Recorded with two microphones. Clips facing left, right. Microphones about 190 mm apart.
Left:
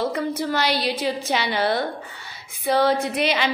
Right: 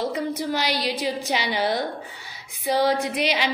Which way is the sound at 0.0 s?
15° right (ahead or behind).